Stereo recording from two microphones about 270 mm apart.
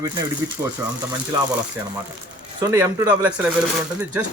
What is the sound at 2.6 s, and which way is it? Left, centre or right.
Speech, centre.